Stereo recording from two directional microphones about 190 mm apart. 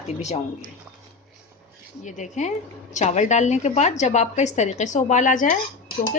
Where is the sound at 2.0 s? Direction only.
40° left (ahead or behind).